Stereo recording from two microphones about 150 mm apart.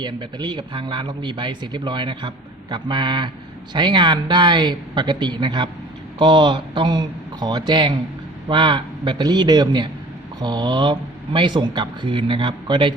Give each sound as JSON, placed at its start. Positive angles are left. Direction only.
{"t": 0.0, "sound": "speech", "side_deg": -30}